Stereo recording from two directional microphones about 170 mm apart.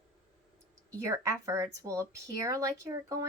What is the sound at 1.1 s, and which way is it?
Speech, 20° right (ahead or behind).